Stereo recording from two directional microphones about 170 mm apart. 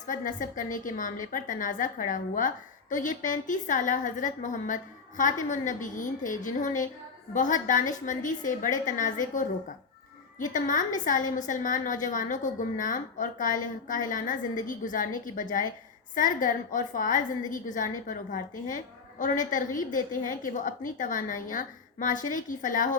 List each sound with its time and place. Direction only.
0.1 s a woman's voice: 50° left (ahead or behind)